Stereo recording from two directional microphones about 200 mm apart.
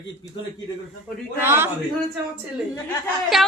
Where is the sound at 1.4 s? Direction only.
10° right (ahead or behind).